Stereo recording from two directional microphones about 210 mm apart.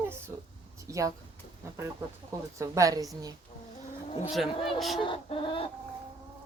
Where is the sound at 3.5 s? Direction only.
30° left (ahead or behind).